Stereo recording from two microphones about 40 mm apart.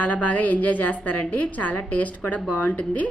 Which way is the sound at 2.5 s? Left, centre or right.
Left.